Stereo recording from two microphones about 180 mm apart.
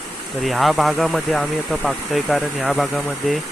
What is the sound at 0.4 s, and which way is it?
Speech, centre (ahead or behind).